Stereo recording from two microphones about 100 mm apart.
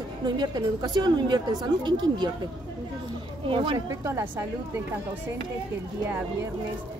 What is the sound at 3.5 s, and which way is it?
Speech, 60° right (ahead or behind).